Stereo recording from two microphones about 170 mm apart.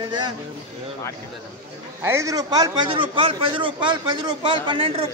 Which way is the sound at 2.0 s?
15° right (ahead or behind).